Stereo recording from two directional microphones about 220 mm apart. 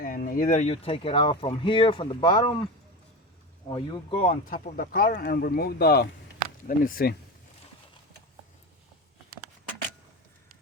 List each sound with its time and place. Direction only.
0.0 s speech: 40° left (ahead or behind); by 2.6 s 20° left (ahead or behind)
3.7 s speech: 20° left (ahead or behind); by 7.2 s 40° left (ahead or behind)